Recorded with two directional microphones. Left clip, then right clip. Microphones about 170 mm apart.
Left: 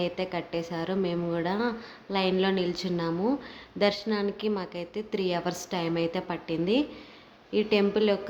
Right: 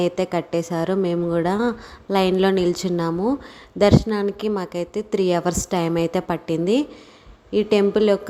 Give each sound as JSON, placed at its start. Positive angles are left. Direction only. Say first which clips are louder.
{"t": 0.0, "sound": "a woman's voice", "louder": "right 9 dB", "side_deg": -45}